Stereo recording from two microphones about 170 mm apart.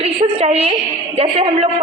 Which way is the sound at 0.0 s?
35° right (ahead or behind).